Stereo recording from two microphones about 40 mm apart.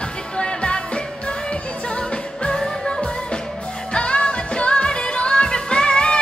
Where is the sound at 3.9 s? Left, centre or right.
Left.